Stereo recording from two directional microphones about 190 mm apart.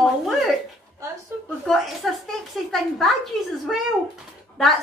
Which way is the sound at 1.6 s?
Centre (ahead or behind).